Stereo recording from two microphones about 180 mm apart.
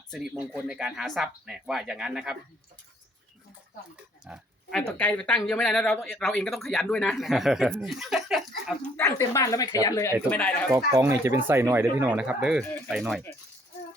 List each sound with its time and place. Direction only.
0.1 s speech: 5° right (ahead or behind)
4.3 s speech: 5° right (ahead or behind)
4.9 s speech: 5° left (ahead or behind)
9.0 s speech: 15° left (ahead or behind)
10.7 s speech: 15° right (ahead or behind); by 13.2 s centre (ahead or behind)